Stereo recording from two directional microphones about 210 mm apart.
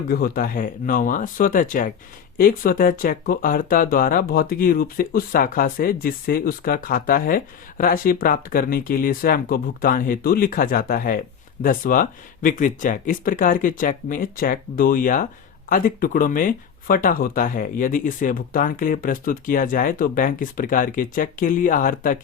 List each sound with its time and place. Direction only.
0.1 s speech: 45° left (ahead or behind)